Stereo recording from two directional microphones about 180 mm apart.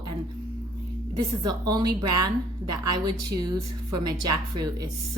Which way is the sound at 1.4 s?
20° right (ahead or behind).